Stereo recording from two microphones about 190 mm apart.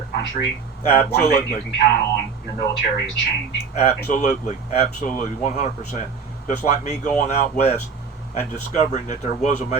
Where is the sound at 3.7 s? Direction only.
40° left (ahead or behind).